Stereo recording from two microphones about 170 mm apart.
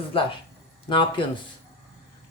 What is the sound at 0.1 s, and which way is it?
Speech, 30° left (ahead or behind).